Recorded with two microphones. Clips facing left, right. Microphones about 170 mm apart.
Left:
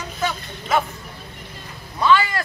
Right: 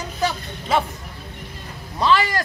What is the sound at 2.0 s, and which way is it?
Speech, 35° right (ahead or behind).